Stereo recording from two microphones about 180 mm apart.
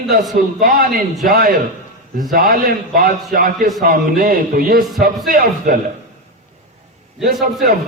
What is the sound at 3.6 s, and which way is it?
Speech, centre (ahead or behind).